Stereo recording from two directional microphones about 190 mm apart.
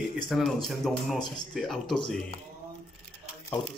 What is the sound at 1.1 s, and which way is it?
Speech, 25° left (ahead or behind).